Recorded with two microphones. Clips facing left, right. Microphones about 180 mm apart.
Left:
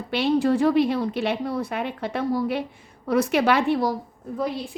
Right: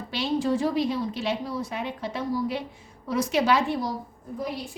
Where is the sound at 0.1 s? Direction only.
60° left (ahead or behind).